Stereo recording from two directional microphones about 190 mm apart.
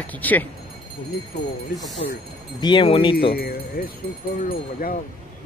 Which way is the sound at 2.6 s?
25° left (ahead or behind).